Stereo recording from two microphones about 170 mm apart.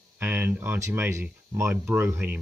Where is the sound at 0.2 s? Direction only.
15° right (ahead or behind).